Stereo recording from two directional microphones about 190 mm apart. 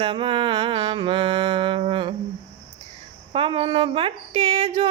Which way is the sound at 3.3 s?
30° right (ahead or behind).